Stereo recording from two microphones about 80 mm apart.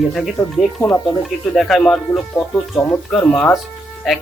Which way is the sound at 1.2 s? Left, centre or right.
Centre.